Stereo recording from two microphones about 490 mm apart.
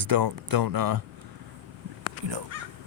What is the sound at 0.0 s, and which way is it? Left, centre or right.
Speech, right.